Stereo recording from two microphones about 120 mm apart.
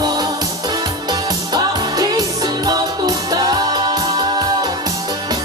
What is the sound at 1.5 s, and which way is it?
Music, 35° right (ahead or behind).